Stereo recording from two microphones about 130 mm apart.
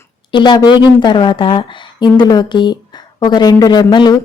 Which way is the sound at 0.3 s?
35° left (ahead or behind).